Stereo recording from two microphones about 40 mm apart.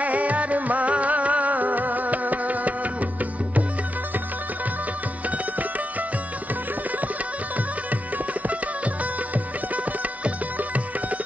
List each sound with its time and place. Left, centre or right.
0.0 s music: right
7.5 s music: right